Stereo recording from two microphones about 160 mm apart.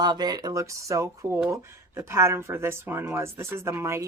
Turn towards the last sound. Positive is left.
turn(degrees=-20)  # may be behind; listen again after turning